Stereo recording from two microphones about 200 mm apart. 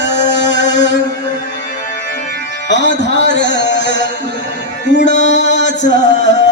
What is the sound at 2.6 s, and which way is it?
Music, 65° left (ahead or behind).